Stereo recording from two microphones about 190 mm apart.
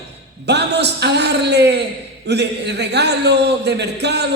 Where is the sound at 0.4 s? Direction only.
60° right (ahead or behind).